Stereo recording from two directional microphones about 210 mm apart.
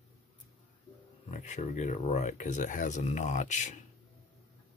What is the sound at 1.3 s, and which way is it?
Speech, 35° left (ahead or behind).